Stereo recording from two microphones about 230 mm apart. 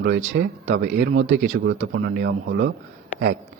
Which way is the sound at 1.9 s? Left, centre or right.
Right.